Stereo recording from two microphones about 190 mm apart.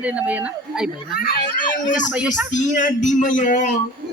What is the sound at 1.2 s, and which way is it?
Speech, 50° left (ahead or behind).